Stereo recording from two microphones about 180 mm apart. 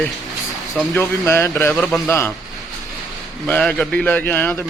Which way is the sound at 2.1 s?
15° left (ahead or behind).